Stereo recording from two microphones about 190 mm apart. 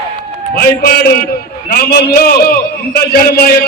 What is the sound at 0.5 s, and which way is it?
A man's voice, 50° left (ahead or behind).